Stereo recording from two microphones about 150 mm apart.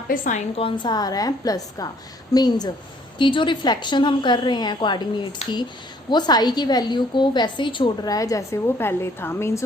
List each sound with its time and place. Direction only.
0.1 s a woman's voice: 60° left (ahead or behind)
0.5 s a woman's voice: 35° left (ahead or behind); by 9.6 s 15° left (ahead or behind)